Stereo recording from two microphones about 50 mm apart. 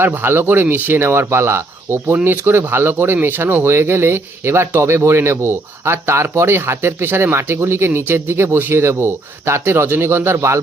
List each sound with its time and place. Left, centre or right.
0.1 s speech: right
2.2 s speech: right